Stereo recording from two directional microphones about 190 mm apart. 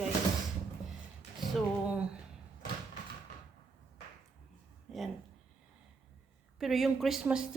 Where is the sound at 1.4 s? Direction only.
5° right (ahead or behind).